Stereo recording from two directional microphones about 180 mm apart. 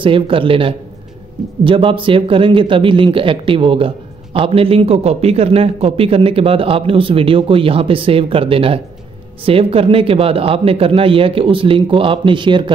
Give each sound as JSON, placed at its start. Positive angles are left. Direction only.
{"t": 0.0, "sound": "speech", "side_deg": -30}